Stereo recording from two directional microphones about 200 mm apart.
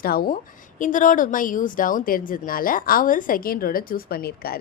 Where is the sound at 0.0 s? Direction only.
50° left (ahead or behind).